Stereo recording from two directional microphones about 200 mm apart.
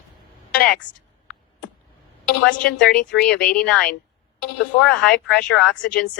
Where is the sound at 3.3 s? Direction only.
50° left (ahead or behind).